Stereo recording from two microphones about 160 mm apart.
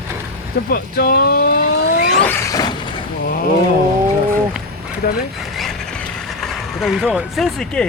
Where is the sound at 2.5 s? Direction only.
25° left (ahead or behind).